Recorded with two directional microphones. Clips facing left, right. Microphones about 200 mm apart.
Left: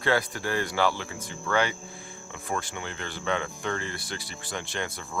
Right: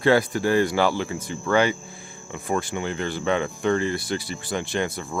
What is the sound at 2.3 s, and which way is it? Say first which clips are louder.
Speech: right 7 dB; 10° right (ahead or behind).